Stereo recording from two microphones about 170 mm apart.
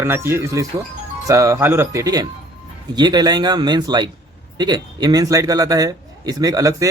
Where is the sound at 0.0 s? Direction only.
15° right (ahead or behind).